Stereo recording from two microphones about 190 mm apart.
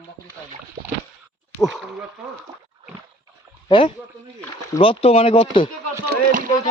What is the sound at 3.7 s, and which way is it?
Speech, 25° left (ahead or behind).